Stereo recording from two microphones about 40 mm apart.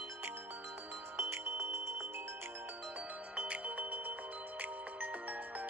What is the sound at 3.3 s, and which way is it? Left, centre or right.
Music, right.